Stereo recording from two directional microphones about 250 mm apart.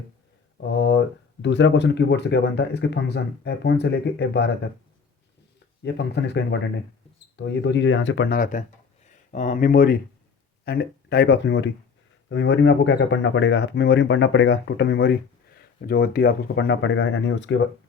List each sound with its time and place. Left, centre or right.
0.7 s speech: left
5.8 s speech: left